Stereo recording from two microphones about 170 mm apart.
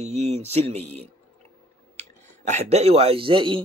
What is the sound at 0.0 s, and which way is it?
A man's voice, 40° right (ahead or behind).